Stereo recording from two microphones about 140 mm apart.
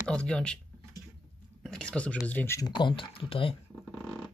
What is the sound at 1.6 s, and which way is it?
Speech, 5° left (ahead or behind).